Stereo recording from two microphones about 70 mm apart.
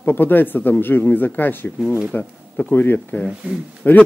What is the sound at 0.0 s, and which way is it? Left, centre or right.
Speech, left.